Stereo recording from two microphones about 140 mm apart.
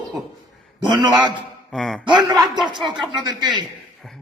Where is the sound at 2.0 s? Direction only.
30° right (ahead or behind).